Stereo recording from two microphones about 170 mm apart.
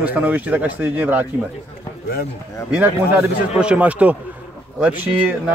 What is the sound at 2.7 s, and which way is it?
A man's voice, 5° right (ahead or behind).